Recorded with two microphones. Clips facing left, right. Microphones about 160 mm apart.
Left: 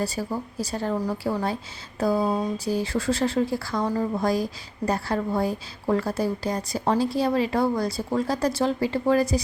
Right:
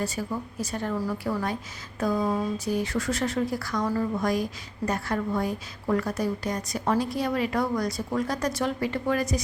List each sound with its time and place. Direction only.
0.0 s a woman's voice: 35° left (ahead or behind)